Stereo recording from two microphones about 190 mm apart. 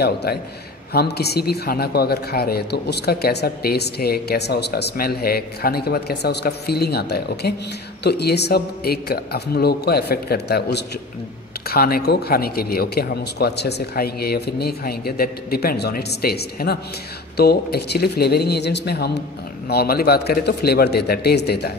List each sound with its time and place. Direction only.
0.0 s speech: 55° left (ahead or behind)